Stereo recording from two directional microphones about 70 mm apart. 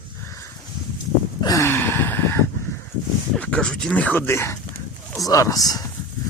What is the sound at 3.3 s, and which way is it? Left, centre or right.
Speech, centre.